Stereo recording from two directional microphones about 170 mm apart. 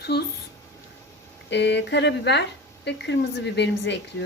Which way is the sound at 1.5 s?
90° left.